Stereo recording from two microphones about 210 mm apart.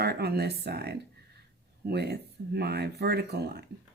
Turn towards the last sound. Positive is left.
turn(degrees=-50)  # may be behind; listen again after turning